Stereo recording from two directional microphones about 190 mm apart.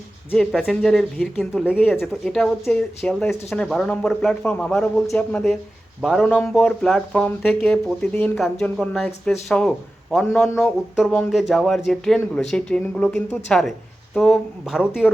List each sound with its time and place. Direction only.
0.3 s speech: 5° left (ahead or behind)